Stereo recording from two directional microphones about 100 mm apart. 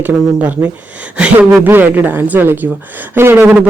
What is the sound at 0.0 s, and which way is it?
A woman's voice, 15° right (ahead or behind).